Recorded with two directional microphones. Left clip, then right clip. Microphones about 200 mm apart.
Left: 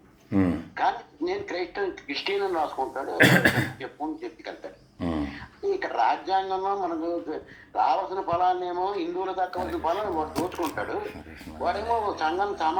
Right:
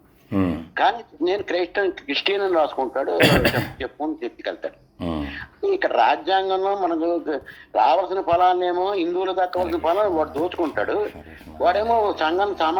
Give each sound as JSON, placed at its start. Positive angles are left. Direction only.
{"t": 0.3, "sound": "a sound", "side_deg": -25}
{"t": 0.7, "sound": "speech", "side_deg": -50}
{"t": 3.2, "sound": "speech", "side_deg": -20}
{"t": 3.8, "sound": "speech", "side_deg": -50}
{"t": 4.9, "sound": "a sound", "side_deg": -20}
{"t": 5.3, "sound": "speech", "side_deg": -50}